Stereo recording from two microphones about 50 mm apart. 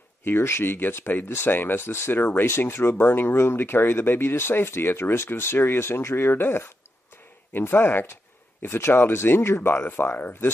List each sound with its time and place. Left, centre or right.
0.4 s speech: left
1.8 s speech: left